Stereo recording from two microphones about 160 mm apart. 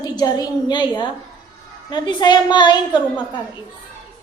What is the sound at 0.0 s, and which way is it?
A woman's voice, 25° left (ahead or behind).